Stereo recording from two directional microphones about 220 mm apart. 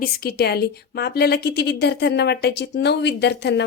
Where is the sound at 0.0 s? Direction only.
45° left (ahead or behind).